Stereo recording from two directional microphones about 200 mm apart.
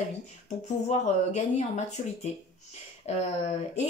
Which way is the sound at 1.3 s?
35° left (ahead or behind).